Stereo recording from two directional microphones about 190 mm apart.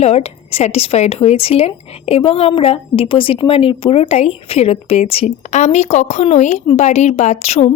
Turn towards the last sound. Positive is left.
turn(degrees=35)  # may be behind; listen again after turning